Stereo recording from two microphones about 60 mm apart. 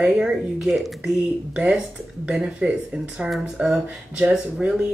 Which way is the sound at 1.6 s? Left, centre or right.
Centre.